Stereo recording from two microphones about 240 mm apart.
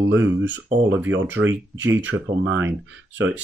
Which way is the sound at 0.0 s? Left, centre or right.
Right.